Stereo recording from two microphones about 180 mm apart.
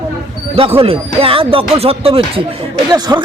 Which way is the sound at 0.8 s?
30° right (ahead or behind).